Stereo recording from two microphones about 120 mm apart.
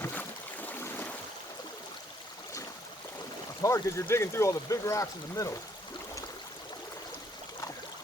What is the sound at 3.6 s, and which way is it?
Speech, 25° left (ahead or behind).